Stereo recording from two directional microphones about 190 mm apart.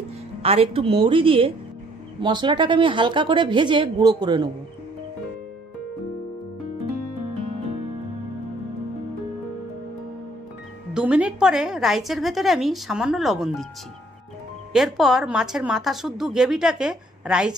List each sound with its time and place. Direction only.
0.4 s a woman's voice: 30° right (ahead or behind)
10.9 s speech: 5° right (ahead or behind)
14.7 s speech: centre (ahead or behind)